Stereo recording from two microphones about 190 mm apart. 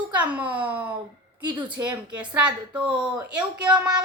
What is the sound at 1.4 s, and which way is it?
Speech, 25° right (ahead or behind).